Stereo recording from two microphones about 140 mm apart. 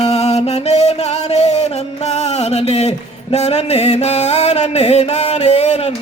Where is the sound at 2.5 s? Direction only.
50° left (ahead or behind).